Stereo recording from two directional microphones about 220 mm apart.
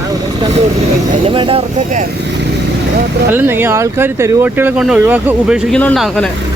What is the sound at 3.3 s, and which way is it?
Speech, 10° right (ahead or behind).